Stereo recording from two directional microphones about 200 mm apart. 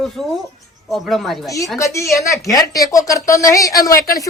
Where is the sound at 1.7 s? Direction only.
15° left (ahead or behind).